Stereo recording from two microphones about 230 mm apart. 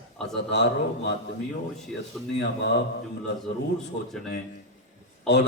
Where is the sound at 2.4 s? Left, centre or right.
Left.